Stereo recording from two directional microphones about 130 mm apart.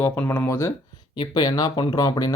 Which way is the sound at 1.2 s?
30° left (ahead or behind).